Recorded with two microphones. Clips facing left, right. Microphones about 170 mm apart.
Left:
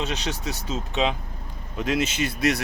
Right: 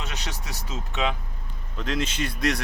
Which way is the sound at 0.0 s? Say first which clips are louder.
Left 7 dB; 20° left (ahead or behind).